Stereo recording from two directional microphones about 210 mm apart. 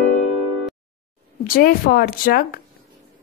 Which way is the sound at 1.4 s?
45° left (ahead or behind).